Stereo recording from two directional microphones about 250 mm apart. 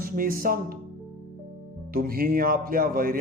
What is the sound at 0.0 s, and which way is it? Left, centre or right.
Speech, right.